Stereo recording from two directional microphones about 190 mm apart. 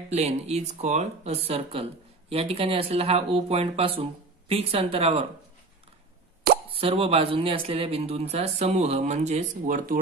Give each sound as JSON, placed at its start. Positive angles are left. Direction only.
{"t": 0.1, "sound": "speech", "side_deg": -35}
{"t": 6.7, "sound": "speech", "side_deg": -30}